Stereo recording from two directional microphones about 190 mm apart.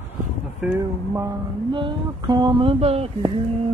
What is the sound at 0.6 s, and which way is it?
Music, 15° right (ahead or behind).